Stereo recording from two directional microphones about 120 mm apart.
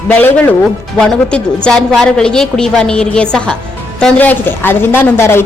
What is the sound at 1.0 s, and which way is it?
A woman's voice, 5° left (ahead or behind).